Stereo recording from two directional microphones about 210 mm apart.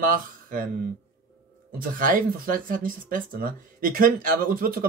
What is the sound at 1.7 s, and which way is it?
Speech, 40° right (ahead or behind).